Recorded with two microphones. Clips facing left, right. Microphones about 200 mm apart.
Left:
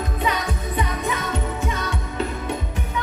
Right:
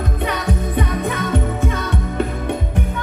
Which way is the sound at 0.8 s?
55° right (ahead or behind).